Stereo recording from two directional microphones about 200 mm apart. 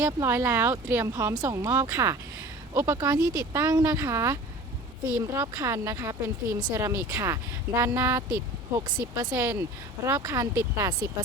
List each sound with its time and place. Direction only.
0.0 s speech: 15° right (ahead or behind)